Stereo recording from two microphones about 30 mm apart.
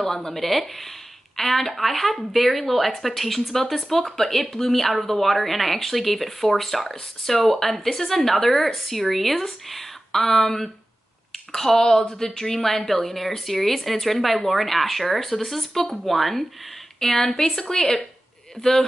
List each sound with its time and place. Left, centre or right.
0.0 s a woman's voice: centre
17.4 s speech: left